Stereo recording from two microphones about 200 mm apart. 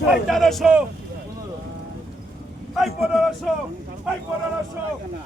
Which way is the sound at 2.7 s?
Centre (ahead or behind).